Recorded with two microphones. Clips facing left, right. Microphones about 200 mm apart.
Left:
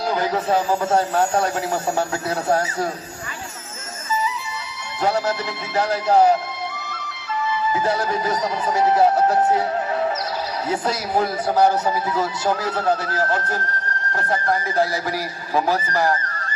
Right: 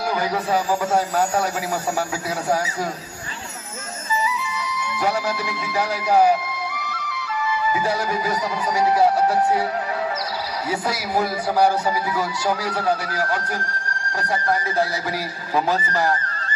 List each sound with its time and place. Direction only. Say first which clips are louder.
0.1 s speech: left 2 dB; 25° left (ahead or behind)
5.7 s a man's voice: left 2 dB; 10° right (ahead or behind)
7.7 s a man's voice: left 3 dB; 10° right (ahead or behind)
8.3 s speech: left 1 dB; 25° left (ahead or behind)
10.7 s a man's voice: left 1 dB; 10° right (ahead or behind)
11.6 s speech: left 1 dB; 20° left (ahead or behind)
13.0 s a man's voice: left 2 dB; 10° right (ahead or behind)